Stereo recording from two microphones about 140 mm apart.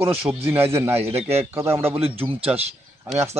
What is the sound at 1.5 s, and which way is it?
Speech, 20° right (ahead or behind).